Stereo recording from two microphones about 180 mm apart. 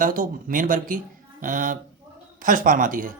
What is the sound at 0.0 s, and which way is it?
Speech, 50° right (ahead or behind).